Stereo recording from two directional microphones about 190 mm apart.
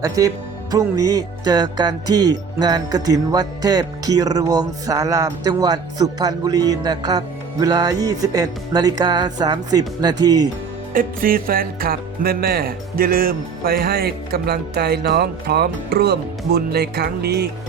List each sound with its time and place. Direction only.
0.2 s speech: 15° right (ahead or behind)
0.7 s music: 15° right (ahead or behind)
10.9 s music: 50° right (ahead or behind)